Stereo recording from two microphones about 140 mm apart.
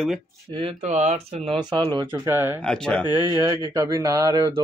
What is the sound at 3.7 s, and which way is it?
Speech, 25° right (ahead or behind).